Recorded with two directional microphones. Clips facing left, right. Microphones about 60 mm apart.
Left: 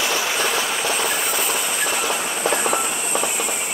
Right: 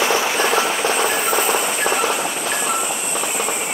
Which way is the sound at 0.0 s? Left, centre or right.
Right.